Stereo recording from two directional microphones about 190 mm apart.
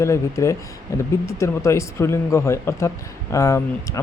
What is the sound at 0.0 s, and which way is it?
Speech, 15° left (ahead or behind).